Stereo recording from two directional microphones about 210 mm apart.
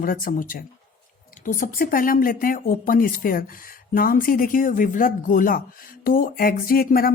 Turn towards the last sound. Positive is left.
turn(degrees=45)  # may be behind; listen again after turning